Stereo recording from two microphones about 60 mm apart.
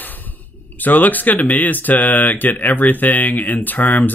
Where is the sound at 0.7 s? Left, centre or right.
Left.